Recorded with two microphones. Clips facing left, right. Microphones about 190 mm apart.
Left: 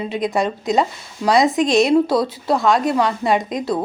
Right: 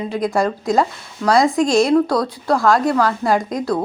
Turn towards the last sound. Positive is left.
turn(degrees=0)  # may be behind; listen again after turning